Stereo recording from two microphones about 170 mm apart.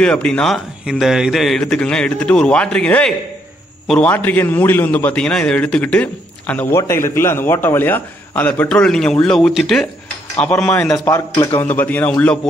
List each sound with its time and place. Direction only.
0.0 s a man's voice: 5° left (ahead or behind)
11.1 s a man's voice: 25° left (ahead or behind)
11.6 s a man's voice: 10° left (ahead or behind)